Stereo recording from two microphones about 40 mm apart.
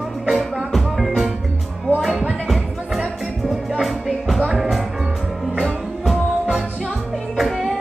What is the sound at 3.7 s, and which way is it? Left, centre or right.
Music, centre.